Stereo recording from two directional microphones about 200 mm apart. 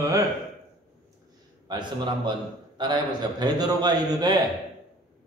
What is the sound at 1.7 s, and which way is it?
A man's voice, 20° right (ahead or behind).